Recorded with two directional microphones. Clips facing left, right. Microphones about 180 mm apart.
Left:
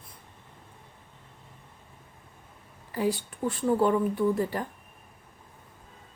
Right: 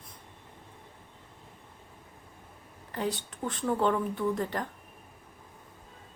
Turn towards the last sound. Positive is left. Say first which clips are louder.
# left 4 dB
turn(degrees=10)  # may be behind; listen again after turning